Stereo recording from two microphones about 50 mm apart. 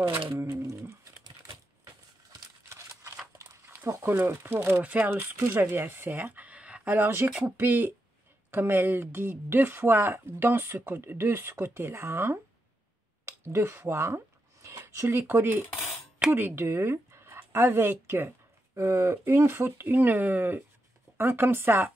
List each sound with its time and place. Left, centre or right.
0.3 s a sound: right
3.9 s a sound: right
4.2 s speech: right
4.8 s speech: right
5.1 s speech: right
6.8 s speech: right
18.8 s speech: right
19.2 s speech: right